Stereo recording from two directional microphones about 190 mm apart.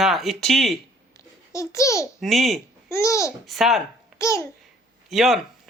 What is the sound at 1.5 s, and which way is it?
Speech, 15° left (ahead or behind).